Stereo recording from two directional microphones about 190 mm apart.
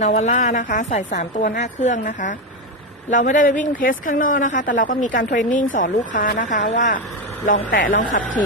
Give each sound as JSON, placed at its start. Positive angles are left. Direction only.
{"t": 0.0, "sound": "a woman's voice", "side_deg": 35}